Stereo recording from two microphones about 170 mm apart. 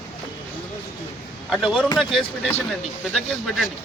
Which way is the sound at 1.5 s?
Centre (ahead or behind).